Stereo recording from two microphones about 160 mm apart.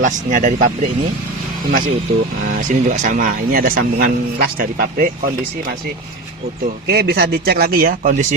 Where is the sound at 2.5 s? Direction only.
50° right (ahead or behind).